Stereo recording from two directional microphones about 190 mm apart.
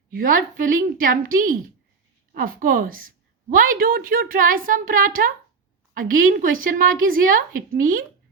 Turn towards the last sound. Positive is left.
turn(degrees=-45)  # may be behind; listen again after turning